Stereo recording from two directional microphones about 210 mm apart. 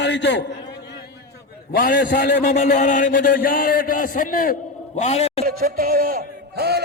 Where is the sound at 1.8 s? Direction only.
45° left (ahead or behind).